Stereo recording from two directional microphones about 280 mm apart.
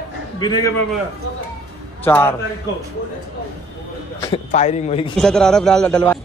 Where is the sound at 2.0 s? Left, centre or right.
Centre.